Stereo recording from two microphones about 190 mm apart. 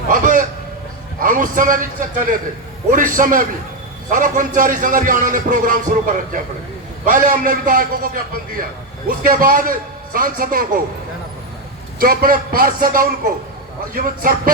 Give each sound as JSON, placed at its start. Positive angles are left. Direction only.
{"t": 0.1, "sound": "a sound", "side_deg": -45}
{"t": 1.2, "sound": "a man's voice", "side_deg": -45}
{"t": 7.0, "sound": "a man's voice", "side_deg": -45}
{"t": 11.9, "sound": "a man's voice", "side_deg": -50}